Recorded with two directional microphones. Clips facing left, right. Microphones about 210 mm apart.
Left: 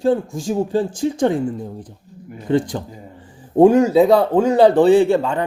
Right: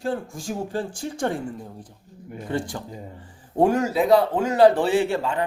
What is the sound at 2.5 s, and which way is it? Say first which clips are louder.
Speech: left 9 dB; 20° left (ahead or behind).